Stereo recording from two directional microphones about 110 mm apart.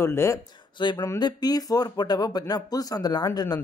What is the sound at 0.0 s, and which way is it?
Speech, 25° left (ahead or behind).